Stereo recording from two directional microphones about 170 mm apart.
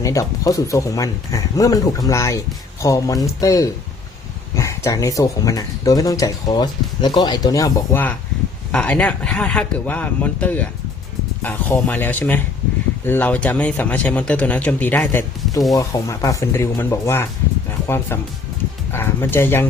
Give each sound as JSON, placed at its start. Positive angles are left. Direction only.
{"t": 0.0, "sound": "speech", "side_deg": 20}
{"t": 15.7, "sound": "speech", "side_deg": 20}
{"t": 17.7, "sound": "music", "side_deg": 15}
{"t": 18.9, "sound": "speech", "side_deg": 15}